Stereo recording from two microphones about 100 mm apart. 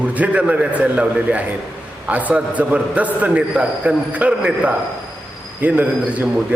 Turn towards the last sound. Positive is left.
turn(degrees=-15)  # may be behind; listen again after turning